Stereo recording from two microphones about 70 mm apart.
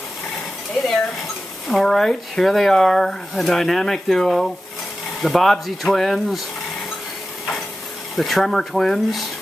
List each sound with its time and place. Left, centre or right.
1.7 s speech: centre
8.2 s speech: centre